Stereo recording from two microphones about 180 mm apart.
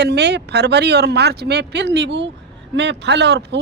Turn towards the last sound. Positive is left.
turn(degrees=-70)  # may be behind; listen again after turning